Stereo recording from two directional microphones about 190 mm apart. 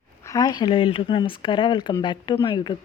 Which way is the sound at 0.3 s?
20° left (ahead or behind).